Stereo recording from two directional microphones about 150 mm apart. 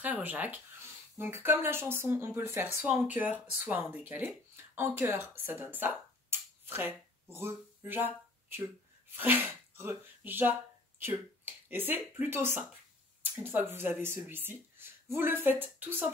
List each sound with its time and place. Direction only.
0.0 s speech: 10° right (ahead or behind)